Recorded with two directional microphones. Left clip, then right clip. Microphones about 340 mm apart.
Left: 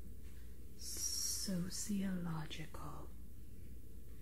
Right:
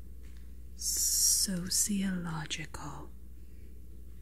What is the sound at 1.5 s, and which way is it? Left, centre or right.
Speech, right.